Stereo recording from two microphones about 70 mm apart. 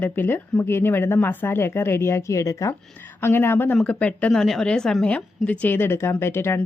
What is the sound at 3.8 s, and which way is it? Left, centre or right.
Speech, centre.